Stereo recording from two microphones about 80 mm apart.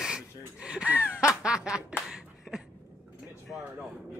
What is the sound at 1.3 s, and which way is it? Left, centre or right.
Snicker, centre.